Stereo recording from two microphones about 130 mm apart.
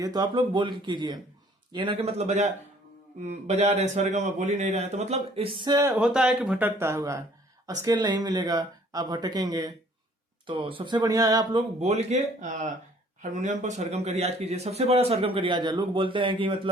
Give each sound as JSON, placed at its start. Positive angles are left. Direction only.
{"t": 0.0, "sound": "a man's voice", "side_deg": -30}
{"t": 6.0, "sound": "speech", "side_deg": -5}
{"t": 10.4, "sound": "speech", "side_deg": -40}
{"t": 11.8, "sound": "a man's voice", "side_deg": -55}